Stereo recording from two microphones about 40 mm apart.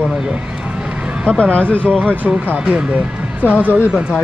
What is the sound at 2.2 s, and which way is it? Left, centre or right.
Speech, right.